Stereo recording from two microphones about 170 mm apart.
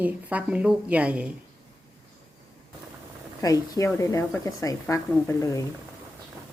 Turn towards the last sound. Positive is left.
turn(degrees=20)  # may be behind; listen again after turning